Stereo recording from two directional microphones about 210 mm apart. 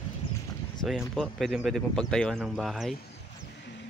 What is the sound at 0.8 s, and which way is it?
Speech, centre (ahead or behind).